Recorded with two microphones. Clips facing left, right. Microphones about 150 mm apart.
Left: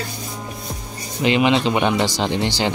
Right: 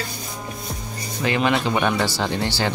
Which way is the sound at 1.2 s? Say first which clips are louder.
Left 4 dB; 20° left (ahead or behind).